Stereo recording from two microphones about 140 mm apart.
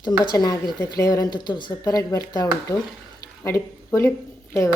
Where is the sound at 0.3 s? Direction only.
30° left (ahead or behind).